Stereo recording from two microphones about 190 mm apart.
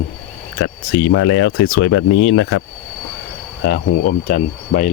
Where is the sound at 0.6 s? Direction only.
90° left.